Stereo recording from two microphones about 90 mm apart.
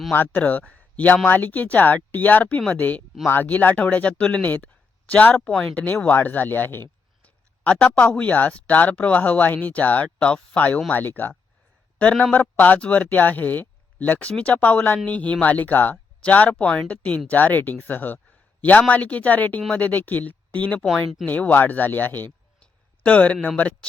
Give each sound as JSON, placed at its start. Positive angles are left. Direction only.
{"t": 0.1, "sound": "speech", "side_deg": 20}
{"t": 20.8, "sound": "speech", "side_deg": 0}
{"t": 21.2, "sound": "speech", "side_deg": 20}